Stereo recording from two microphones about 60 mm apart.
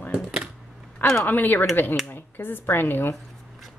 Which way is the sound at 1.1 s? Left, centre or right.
Left.